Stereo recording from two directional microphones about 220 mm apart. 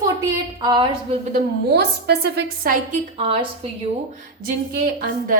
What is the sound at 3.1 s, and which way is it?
Speech, 25° right (ahead or behind).